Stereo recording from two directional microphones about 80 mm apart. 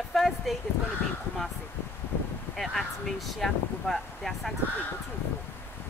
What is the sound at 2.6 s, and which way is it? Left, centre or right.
Speech, centre.